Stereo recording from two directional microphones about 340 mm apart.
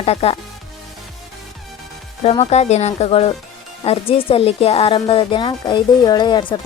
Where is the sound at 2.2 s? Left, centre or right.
Centre.